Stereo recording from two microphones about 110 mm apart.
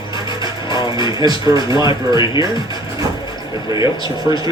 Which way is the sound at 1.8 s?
45° left (ahead or behind).